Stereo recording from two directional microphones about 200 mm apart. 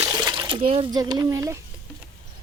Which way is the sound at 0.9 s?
20° right (ahead or behind).